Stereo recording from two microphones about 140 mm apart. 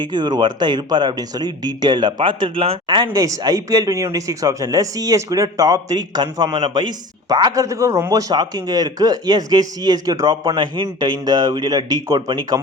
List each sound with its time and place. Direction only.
0.0 s speech: 30° right (ahead or behind)
3.1 s speech: 25° right (ahead or behind)